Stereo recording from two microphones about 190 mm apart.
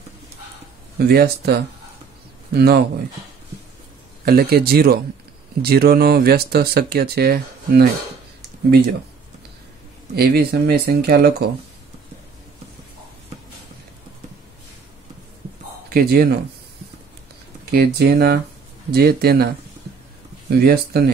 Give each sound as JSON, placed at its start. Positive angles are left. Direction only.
{"t": 0.9, "sound": "speech", "side_deg": -55}
{"t": 4.2, "sound": "speech", "side_deg": -55}
{"t": 10.1, "sound": "speech", "side_deg": -50}
{"t": 15.9, "sound": "speech", "side_deg": -55}
{"t": 17.6, "sound": "speech", "side_deg": -55}